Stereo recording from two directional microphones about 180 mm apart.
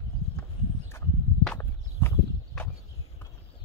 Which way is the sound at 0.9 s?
15° left (ahead or behind).